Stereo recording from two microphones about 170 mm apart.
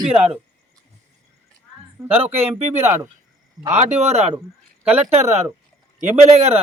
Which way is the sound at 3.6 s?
40° right (ahead or behind).